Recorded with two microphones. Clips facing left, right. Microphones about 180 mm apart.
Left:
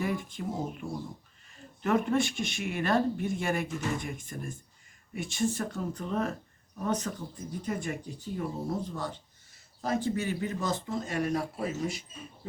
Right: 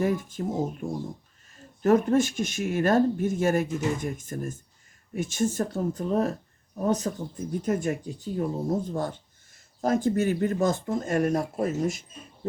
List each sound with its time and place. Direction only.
0.0 s speech: 45° right (ahead or behind)